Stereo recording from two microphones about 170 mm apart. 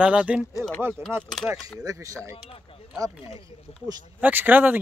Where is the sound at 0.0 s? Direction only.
5° right (ahead or behind).